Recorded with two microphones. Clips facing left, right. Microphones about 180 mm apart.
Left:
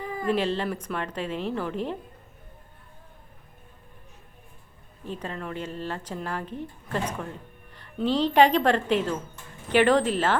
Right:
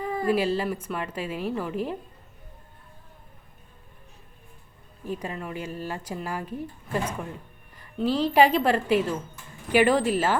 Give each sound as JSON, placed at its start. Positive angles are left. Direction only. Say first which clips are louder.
{"t": 0.0, "sound": "a sound", "louder": "right 4 dB", "side_deg": -35}
{"t": 0.3, "sound": "a woman's voice", "louder": "right 1 dB", "side_deg": -5}
{"t": 5.0, "sound": "a woman's voice", "louder": "right 1 dB", "side_deg": -10}